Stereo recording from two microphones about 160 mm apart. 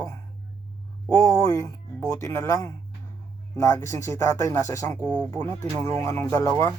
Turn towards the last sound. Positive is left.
turn(degrees=20)  # may be behind; listen again after turning